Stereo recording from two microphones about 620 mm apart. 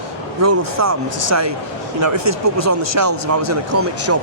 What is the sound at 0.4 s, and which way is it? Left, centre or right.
Speech, right.